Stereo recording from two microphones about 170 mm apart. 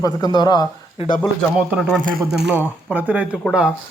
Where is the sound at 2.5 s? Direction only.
10° right (ahead or behind).